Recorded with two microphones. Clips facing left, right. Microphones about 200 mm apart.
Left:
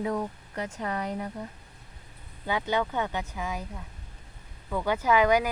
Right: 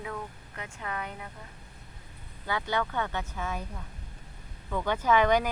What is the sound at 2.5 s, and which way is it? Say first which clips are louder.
Speech: left 3 dB; 20° left (ahead or behind).